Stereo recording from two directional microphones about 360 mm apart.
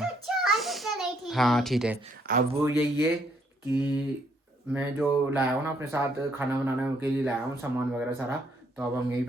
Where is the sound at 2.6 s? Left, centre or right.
Centre.